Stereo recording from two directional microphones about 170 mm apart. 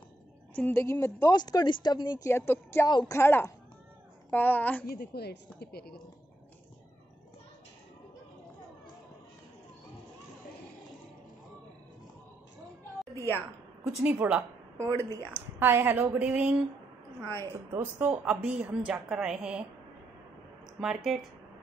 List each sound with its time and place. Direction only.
0.6 s a woman's voice: 10° left (ahead or behind)
2.9 s a woman's voice: 25° left (ahead or behind)
3.2 s a woman's voice: 15° left (ahead or behind)
4.8 s speech: 70° left (ahead or behind)
13.1 s a woman's voice: 15° left (ahead or behind)
14.0 s a woman's voice: 10° right (ahead or behind)
17.4 s a woman's voice: 20° right (ahead or behind)
18.0 s a woman's voice: 5° right (ahead or behind)
20.8 s speech: centre (ahead or behind)